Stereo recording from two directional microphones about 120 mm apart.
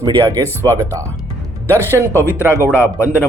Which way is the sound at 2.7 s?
20° left (ahead or behind).